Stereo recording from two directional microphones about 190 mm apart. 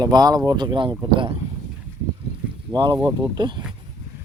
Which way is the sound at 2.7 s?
25° right (ahead or behind).